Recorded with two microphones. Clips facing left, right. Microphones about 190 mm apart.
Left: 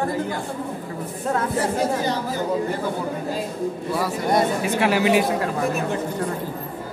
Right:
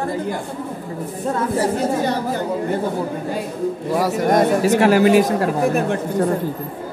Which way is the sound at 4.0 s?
45° right (ahead or behind).